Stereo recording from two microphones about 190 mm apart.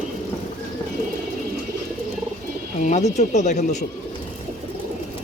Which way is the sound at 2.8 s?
40° left (ahead or behind).